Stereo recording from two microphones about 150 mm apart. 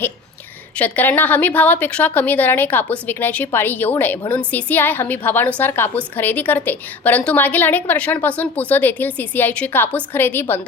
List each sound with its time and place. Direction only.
0.8 s a woman's voice: 10° left (ahead or behind)